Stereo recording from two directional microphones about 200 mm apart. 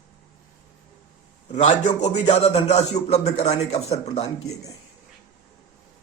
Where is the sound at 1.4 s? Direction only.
35° left (ahead or behind).